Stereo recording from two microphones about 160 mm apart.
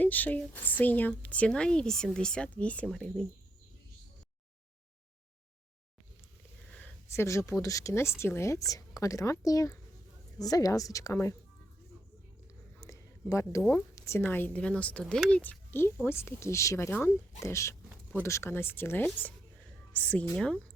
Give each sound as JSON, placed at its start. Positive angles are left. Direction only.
{"t": 0.0, "sound": "speech", "side_deg": 10}
{"t": 6.7, "sound": "speech", "side_deg": 10}
{"t": 12.8, "sound": "a woman's voice", "side_deg": 20}